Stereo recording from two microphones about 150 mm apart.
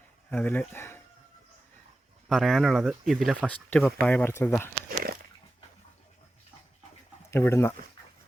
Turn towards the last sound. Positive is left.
turn(degrees=15)  # may be behind; listen again after turning